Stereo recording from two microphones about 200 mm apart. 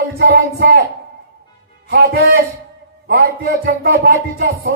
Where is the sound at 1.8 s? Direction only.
55° right (ahead or behind).